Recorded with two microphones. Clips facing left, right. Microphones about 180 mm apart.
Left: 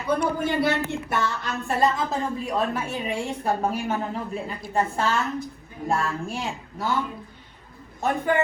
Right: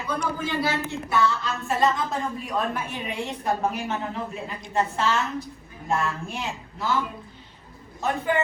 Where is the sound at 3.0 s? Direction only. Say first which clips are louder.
Left 1 dB; 30° left (ahead or behind).